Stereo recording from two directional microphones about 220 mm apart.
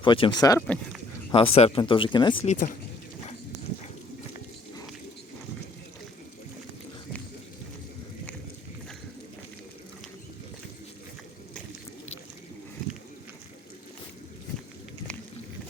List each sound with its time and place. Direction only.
0.0 s speech: 20° left (ahead or behind)
1.3 s speech: 25° left (ahead or behind)